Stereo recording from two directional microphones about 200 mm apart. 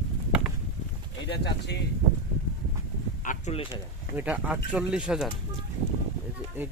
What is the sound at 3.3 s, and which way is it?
Speech, 35° left (ahead or behind).